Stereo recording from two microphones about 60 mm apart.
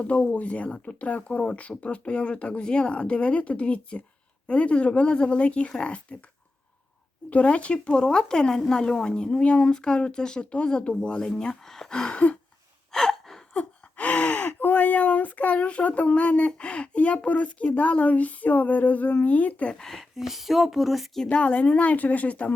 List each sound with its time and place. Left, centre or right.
0.0 s speech: left
7.3 s speech: left
12.9 s gasp: centre
13.5 s speech: left
19.8 s speech: centre
21.2 s speech: left